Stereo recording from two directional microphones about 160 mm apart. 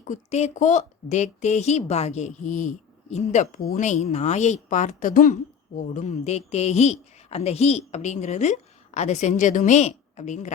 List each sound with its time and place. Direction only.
0.0 s speech: 45° left (ahead or behind)